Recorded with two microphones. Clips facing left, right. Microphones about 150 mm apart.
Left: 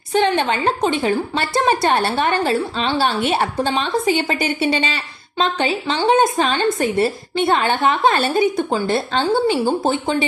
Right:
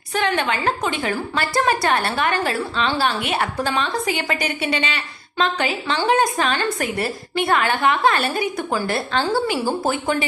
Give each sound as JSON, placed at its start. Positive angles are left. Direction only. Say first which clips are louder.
{"t": 0.1, "sound": "a woman's voice", "louder": "left 4 dB", "side_deg": 25}